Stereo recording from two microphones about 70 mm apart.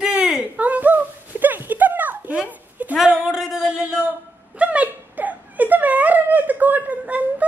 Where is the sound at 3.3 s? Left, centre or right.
Centre.